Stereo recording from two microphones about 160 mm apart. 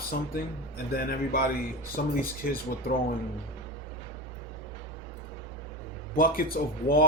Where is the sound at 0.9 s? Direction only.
70° left (ahead or behind).